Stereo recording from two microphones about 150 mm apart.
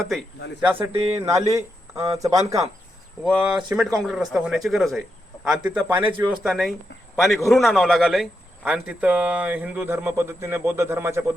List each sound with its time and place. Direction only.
0.6 s a man's voice: 15° right (ahead or behind)
3.2 s speech: 10° right (ahead or behind)